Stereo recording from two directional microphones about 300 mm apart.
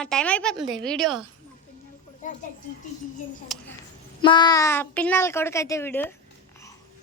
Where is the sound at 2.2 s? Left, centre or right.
Left.